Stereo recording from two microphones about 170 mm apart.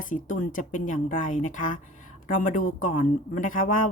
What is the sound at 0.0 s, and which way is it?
Speech, 50° left (ahead or behind).